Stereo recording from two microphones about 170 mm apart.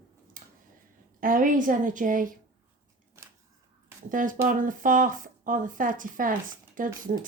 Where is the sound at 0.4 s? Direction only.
55° right (ahead or behind).